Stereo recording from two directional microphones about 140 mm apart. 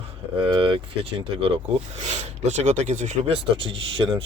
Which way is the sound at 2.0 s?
50° right (ahead or behind).